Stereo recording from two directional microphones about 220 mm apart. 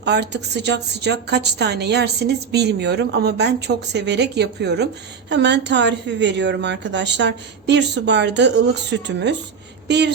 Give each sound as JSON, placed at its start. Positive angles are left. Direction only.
{"t": 0.0, "sound": "a woman's voice", "side_deg": -50}